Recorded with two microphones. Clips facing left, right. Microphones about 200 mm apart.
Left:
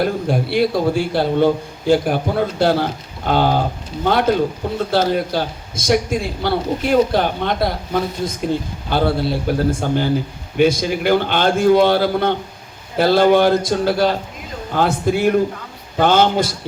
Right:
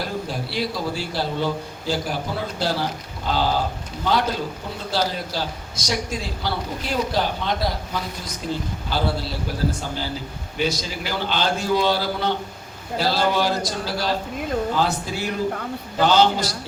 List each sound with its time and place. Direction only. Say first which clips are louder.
0.0 s a man's voice: left 9 dB; 55° left (ahead or behind)